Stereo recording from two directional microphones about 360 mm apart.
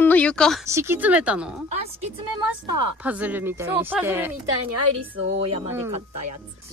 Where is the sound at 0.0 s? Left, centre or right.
Centre.